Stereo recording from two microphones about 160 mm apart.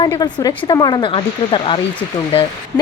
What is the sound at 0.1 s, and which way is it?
Speech, 25° left (ahead or behind).